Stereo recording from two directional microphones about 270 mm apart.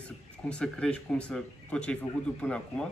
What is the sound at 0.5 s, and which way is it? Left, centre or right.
Speech, centre.